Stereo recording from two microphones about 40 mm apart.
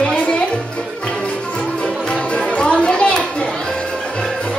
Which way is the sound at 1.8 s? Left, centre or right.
Left.